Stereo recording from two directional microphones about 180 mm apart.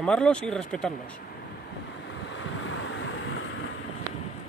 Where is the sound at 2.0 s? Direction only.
80° left.